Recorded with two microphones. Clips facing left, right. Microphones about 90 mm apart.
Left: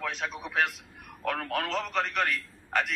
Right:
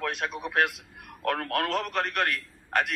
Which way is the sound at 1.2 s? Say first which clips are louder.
Right 3 dB; 50° right (ahead or behind).